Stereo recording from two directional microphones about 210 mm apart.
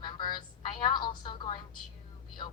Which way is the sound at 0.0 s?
20° left (ahead or behind).